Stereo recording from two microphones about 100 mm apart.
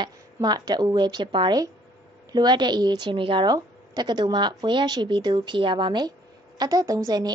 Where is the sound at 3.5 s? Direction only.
45° right (ahead or behind).